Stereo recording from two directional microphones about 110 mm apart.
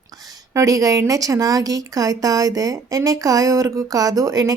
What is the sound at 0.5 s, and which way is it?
A woman's voice, 30° right (ahead or behind).